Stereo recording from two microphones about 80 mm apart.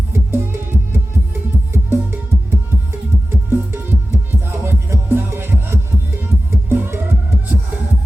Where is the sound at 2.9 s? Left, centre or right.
Right.